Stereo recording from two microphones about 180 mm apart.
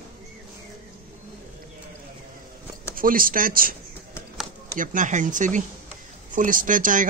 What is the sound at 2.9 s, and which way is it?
Speech, 50° right (ahead or behind).